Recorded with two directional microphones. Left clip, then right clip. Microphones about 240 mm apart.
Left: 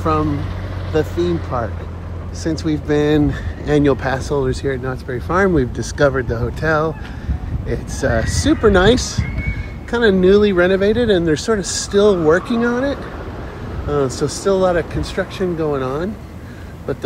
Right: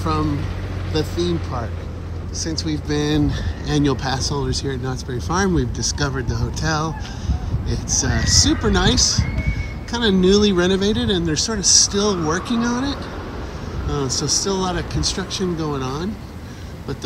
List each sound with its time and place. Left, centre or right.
2.4 s speech: centre